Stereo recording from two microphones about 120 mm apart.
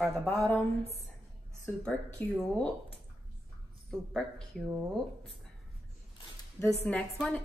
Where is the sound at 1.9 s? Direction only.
5° left (ahead or behind).